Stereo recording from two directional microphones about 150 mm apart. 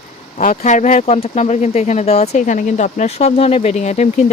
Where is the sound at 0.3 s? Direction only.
50° left (ahead or behind).